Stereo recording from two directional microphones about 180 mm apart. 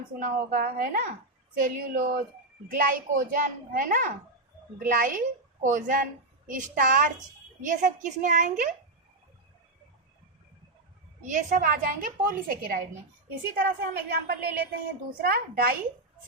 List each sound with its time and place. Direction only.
0.2 s a woman's voice: 50° right (ahead or behind)
11.2 s a woman's voice: 45° right (ahead or behind)